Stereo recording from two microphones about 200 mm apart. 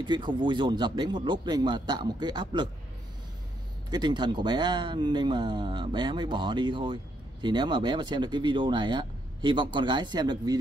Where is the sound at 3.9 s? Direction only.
20° right (ahead or behind).